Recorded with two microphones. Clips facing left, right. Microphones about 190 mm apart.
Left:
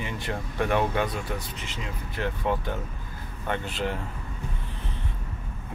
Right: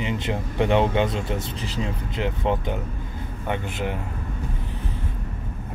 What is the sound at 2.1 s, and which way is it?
Speech, 20° right (ahead or behind).